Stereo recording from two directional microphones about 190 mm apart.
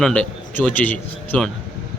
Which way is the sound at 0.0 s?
5° left (ahead or behind).